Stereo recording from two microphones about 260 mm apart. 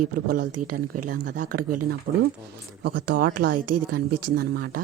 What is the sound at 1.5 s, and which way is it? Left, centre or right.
Speech, right.